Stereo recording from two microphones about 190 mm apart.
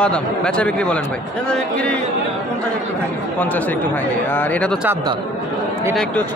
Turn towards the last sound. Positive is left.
turn(degrees=5)  # may be behind; listen again after turning